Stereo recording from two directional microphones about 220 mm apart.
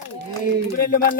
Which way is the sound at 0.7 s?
40° left (ahead or behind).